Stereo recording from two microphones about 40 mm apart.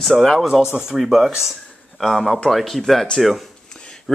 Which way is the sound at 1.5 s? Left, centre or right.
Centre.